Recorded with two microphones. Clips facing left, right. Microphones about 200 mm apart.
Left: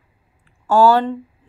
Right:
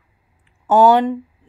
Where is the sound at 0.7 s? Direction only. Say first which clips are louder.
Right 1 dB; 20° right (ahead or behind).